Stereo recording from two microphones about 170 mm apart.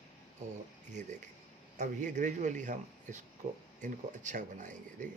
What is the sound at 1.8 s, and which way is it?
Speech, 45° right (ahead or behind).